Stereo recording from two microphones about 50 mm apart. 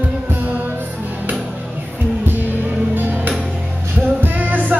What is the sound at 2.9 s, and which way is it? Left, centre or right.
Music, right.